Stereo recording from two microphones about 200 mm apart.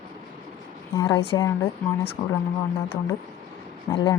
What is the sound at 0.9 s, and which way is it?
A woman's voice, 20° left (ahead or behind).